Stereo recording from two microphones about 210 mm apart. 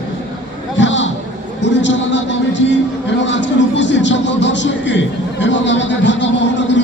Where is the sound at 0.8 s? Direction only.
60° left (ahead or behind).